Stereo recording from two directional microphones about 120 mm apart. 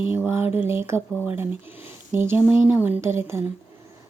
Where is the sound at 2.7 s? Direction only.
15° right (ahead or behind).